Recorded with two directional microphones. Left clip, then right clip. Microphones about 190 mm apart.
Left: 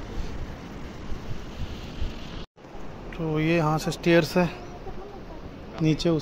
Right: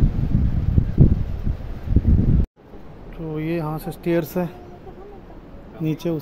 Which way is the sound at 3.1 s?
Centre (ahead or behind).